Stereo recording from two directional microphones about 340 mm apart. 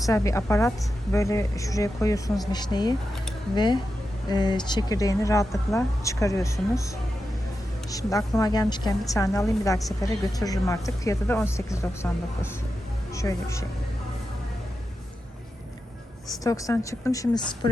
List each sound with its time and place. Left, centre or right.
0.0 s a woman's voice: centre
7.9 s a woman's voice: centre
16.4 s a woman's voice: centre